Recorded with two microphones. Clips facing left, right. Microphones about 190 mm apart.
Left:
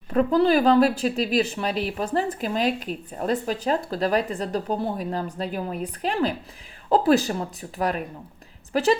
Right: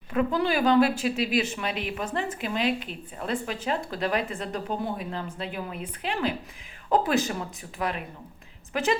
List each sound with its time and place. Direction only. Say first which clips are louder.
0.1 s a woman's voice: left 6 dB; 35° left (ahead or behind)